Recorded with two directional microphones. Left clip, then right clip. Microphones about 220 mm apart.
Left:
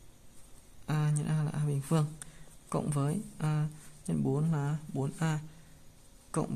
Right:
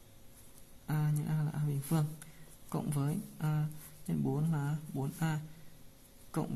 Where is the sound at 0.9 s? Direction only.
30° left (ahead or behind).